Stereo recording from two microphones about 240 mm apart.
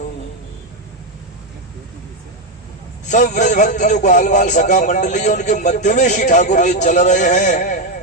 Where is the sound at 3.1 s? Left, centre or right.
Left.